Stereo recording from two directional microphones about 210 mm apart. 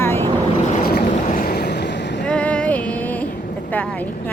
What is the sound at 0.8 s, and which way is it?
Boat, 45° left (ahead or behind).